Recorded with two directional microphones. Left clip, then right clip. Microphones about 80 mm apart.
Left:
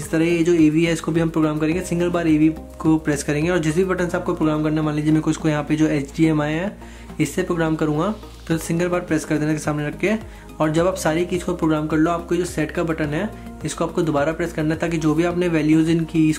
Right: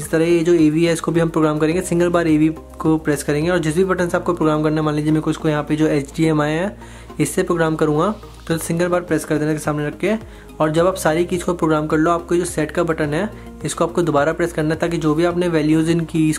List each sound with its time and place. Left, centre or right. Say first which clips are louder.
0.1 s speech: right 3 dB; right